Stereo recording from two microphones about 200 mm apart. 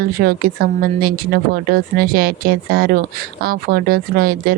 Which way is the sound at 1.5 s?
45° right (ahead or behind).